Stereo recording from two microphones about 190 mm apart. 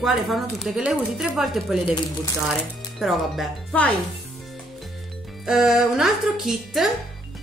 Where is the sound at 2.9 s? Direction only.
Centre (ahead or behind).